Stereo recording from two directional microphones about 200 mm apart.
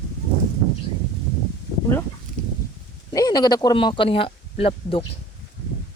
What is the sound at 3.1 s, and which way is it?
Speech, 20° left (ahead or behind).